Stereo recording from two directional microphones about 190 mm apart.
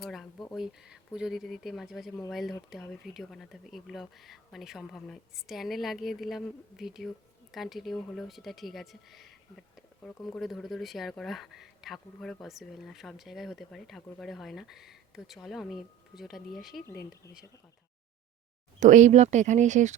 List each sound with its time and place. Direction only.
0.0 s speech: centre (ahead or behind)
18.8 s speech: 40° right (ahead or behind)